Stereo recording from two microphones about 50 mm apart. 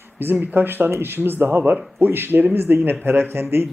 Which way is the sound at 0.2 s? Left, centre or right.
Right.